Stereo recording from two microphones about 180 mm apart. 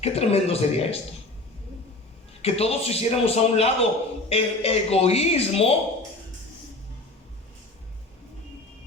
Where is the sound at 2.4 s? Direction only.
35° left (ahead or behind).